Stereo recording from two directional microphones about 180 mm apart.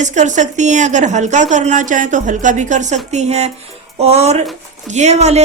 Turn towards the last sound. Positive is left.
turn(degrees=-35)  # may be behind; listen again after turning